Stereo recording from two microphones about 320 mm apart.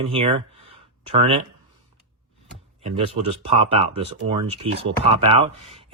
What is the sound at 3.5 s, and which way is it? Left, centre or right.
Speech, centre.